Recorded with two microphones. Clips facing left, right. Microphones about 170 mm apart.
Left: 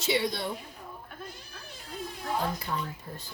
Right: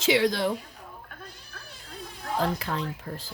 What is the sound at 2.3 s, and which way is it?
Speech, 90° right.